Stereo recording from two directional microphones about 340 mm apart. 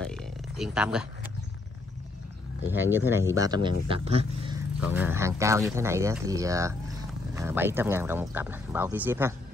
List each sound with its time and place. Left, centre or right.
0.0 s a sound: centre
2.7 s speech: centre
4.7 s speech: centre